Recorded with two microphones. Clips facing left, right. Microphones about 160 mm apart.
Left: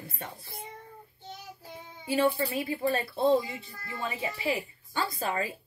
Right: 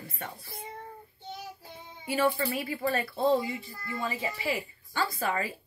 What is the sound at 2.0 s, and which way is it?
A woman's voice, 25° left (ahead or behind).